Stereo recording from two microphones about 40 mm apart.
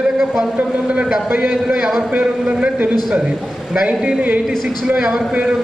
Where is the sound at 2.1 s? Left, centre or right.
Right.